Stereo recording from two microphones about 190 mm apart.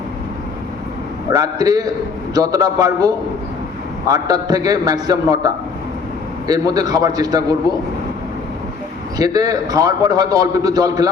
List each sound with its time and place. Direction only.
1.3 s a man's voice: 20° right (ahead or behind)
6.5 s a man's voice: 20° right (ahead or behind)
9.1 s a man's voice: 20° right (ahead or behind)